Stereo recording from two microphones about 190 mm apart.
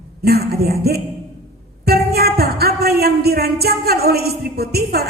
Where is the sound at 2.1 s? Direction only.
55° right (ahead or behind).